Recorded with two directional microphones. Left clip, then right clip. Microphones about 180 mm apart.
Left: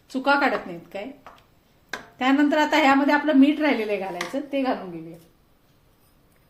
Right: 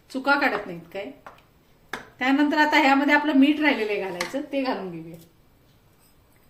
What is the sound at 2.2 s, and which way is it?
A woman's voice, 40° left (ahead or behind).